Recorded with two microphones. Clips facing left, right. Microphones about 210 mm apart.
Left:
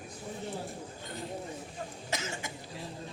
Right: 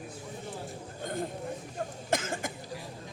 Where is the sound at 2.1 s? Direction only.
50° right (ahead or behind).